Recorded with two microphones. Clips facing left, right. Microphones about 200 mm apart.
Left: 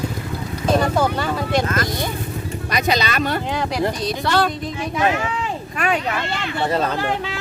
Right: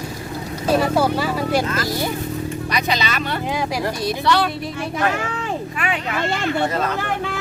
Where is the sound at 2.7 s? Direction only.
45° left (ahead or behind).